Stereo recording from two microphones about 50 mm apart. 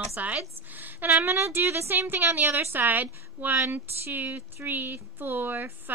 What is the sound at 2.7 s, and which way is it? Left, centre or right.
A woman's voice, right.